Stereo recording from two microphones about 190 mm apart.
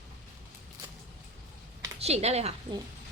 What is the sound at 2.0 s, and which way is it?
Speech, 35° right (ahead or behind).